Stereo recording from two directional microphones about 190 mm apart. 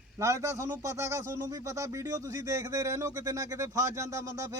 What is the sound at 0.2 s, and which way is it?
A man's voice, 15° right (ahead or behind).